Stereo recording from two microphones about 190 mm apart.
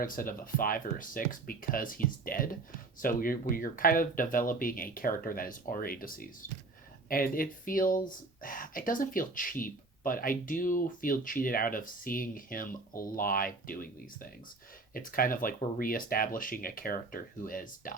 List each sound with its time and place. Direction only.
0.0 s speech: 45° left (ahead or behind)